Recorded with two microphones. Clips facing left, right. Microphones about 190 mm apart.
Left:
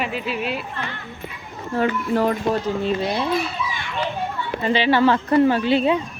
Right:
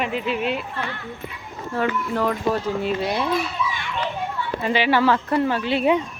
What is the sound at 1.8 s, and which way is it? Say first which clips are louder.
Speech: left 3 dB; 30° left (ahead or behind).